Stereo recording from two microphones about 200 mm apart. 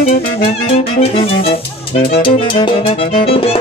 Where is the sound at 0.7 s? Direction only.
30° left (ahead or behind).